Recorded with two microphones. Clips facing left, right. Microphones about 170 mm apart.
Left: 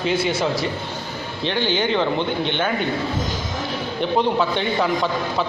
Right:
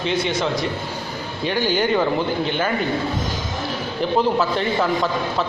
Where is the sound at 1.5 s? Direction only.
10° right (ahead or behind).